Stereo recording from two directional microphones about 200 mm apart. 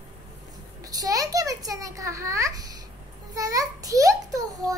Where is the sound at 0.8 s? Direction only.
20° right (ahead or behind).